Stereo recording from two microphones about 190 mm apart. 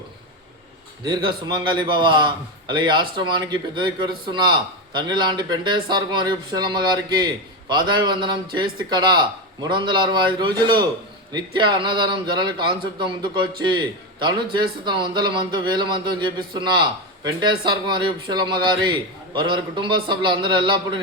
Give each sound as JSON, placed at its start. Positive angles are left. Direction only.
{"t": 1.0, "sound": "a man's voice", "side_deg": -20}